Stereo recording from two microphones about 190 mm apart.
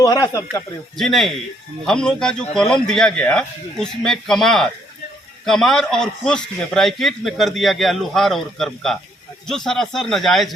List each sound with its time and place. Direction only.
0.0 s speech: 20° left (ahead or behind)
0.9 s a man's voice: centre (ahead or behind)